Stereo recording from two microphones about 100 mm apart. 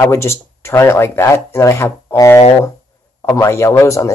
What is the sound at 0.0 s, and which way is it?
A man's voice, 25° left (ahead or behind).